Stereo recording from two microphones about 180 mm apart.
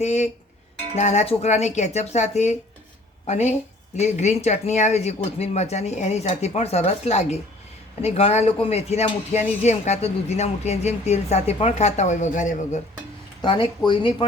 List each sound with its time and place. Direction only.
0.0 s speech: 40° left (ahead or behind)
13.4 s speech: 25° left (ahead or behind)